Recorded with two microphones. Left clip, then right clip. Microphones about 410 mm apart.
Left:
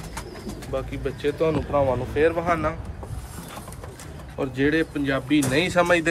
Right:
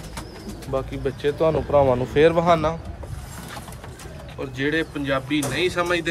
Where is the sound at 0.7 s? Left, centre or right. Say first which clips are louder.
Right 3 dB; right.